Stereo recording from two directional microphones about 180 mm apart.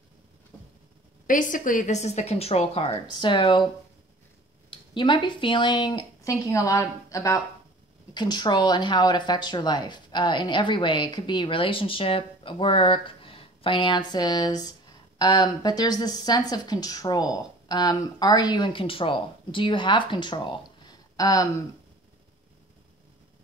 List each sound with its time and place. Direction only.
1.2 s a woman's voice: 45° left (ahead or behind); by 3.6 s 30° left (ahead or behind)
4.6 s speech: 25° left (ahead or behind)